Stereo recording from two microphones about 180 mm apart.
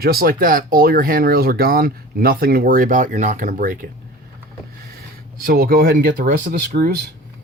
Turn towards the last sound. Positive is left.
turn(degrees=-50)  # may be behind; listen again after turning